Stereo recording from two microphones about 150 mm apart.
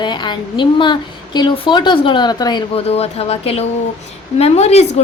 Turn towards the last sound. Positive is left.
turn(degrees=45)  # may be behind; listen again after turning